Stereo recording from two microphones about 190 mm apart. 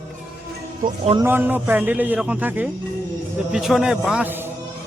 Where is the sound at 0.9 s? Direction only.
25° right (ahead or behind).